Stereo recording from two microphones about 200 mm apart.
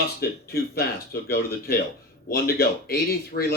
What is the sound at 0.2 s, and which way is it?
Speech, 50° left (ahead or behind).